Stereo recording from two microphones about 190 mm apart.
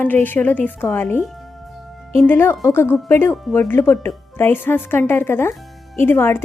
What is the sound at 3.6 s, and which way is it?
A woman's voice, 10° left (ahead or behind).